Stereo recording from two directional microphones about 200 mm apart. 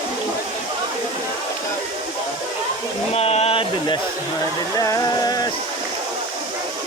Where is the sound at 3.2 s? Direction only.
30° left (ahead or behind).